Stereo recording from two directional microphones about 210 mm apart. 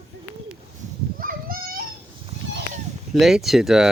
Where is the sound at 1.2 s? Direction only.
45° right (ahead or behind).